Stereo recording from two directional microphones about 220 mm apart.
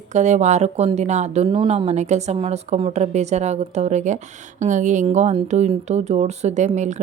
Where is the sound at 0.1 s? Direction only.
30° right (ahead or behind).